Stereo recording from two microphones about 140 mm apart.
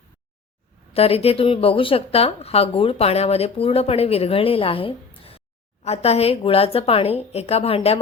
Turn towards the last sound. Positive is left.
turn(degrees=45)  # may be behind; listen again after turning